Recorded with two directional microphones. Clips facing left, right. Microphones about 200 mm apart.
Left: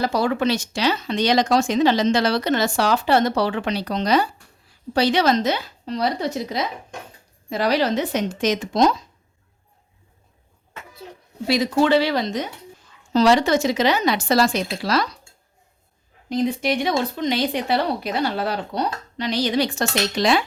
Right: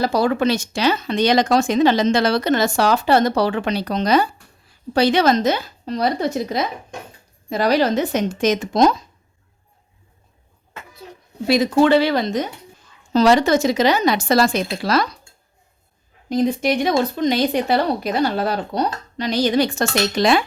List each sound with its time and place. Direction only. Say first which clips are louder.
0.0 s speech: right 3 dB; 40° right (ahead or behind)
11.4 s speech: right 4 dB; 50° right (ahead or behind)
16.3 s speech: right 3 dB; 45° right (ahead or behind)